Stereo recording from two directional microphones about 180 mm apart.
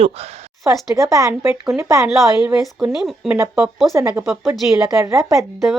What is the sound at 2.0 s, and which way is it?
Speech, 5° right (ahead or behind).